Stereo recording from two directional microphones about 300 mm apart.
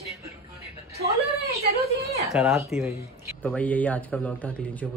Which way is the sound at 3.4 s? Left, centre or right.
Centre.